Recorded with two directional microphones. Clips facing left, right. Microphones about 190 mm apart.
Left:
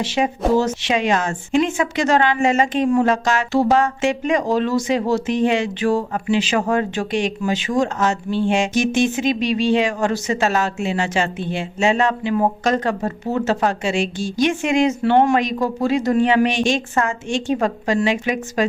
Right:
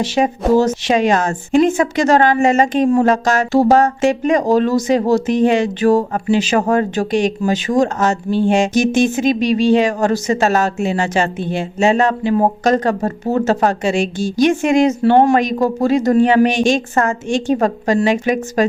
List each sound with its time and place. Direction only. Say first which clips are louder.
0.0 s speech: right 3 dB; 40° right (ahead or behind)